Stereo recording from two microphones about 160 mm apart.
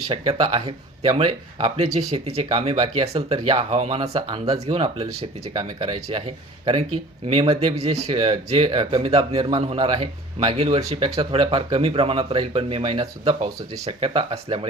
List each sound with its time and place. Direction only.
0.1 s speech: 30° right (ahead or behind)